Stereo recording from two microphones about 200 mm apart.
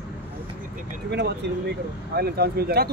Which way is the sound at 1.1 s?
60° right (ahead or behind).